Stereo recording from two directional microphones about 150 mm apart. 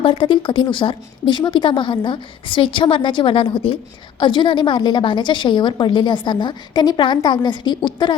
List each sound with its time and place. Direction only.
0.0 s a woman's voice: 35° left (ahead or behind)